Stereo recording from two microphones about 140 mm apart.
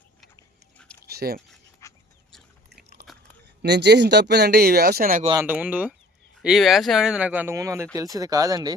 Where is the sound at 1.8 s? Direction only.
20° left (ahead or behind).